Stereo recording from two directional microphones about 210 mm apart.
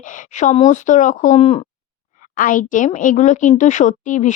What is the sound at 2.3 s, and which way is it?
A woman's voice, 40° left (ahead or behind).